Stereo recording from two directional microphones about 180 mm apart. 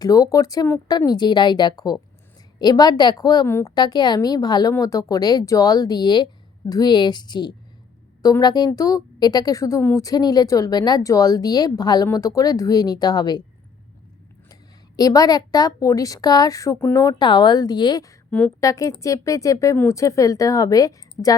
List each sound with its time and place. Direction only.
0.0 s a woman's voice: 20° left (ahead or behind)
14.5 s a woman's voice: 20° left (ahead or behind)
18.3 s a woman's voice: 5° left (ahead or behind)
18.6 s a woman's voice: 20° left (ahead or behind)